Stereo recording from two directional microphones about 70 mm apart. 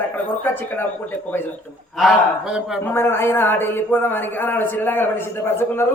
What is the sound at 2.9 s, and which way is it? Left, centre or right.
Speech, left.